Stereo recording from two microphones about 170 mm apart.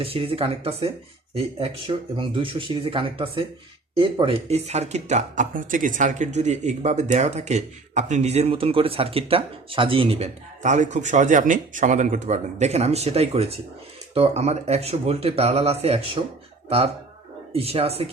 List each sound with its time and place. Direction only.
0.0 s speech: 35° right (ahead or behind)